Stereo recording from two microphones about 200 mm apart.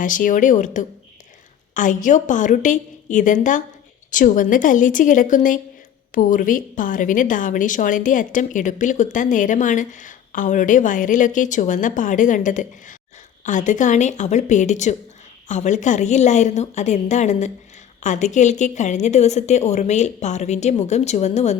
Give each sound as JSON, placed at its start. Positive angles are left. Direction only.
{"t": 0.0, "sound": "a woman's voice", "side_deg": 40}